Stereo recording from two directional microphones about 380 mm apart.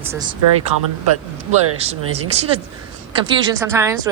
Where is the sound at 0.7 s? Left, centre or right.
Right.